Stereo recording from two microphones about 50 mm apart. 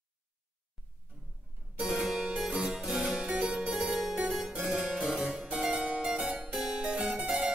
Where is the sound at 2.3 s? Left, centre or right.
Centre.